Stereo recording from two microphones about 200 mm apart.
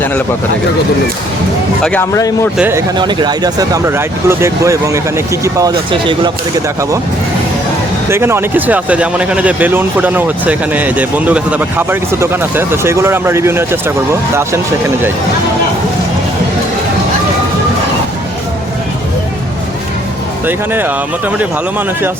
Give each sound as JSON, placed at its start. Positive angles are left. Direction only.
{"t": 1.8, "sound": "speech", "side_deg": 5}
{"t": 2.1, "sound": "a man's voice", "side_deg": 15}
{"t": 2.6, "sound": "speech", "side_deg": -10}
{"t": 3.0, "sound": "speech", "side_deg": -20}
{"t": 8.1, "sound": "speech", "side_deg": -10}
{"t": 20.5, "sound": "speech", "side_deg": -10}